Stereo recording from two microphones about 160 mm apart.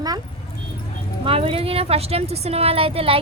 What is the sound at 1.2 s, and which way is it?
Speech, 35° right (ahead or behind).